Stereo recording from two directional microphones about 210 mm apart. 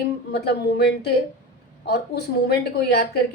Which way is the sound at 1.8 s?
50° left (ahead or behind).